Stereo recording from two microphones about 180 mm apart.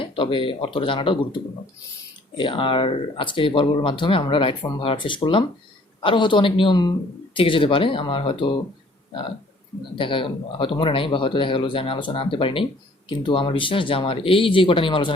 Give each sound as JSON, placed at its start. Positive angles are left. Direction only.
{"t": 0.0, "sound": "speech", "side_deg": 30}
{"t": 2.4, "sound": "speech", "side_deg": 30}
{"t": 9.9, "sound": "speech", "side_deg": 30}